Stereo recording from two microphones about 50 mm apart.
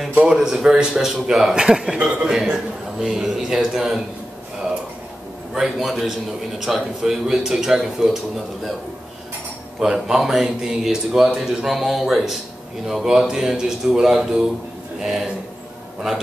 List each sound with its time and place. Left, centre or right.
0.4 s speech: centre
1.5 s a man's voice: centre
2.4 s speech: centre
5.8 s a man's voice: centre
9.8 s a man's voice: centre